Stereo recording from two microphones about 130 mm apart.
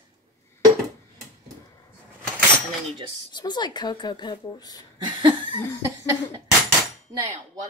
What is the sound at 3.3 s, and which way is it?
Speech, 35° left (ahead or behind).